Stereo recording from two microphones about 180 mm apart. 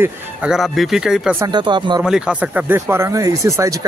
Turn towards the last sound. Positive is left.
turn(degrees=-15)  # may be behind; listen again after turning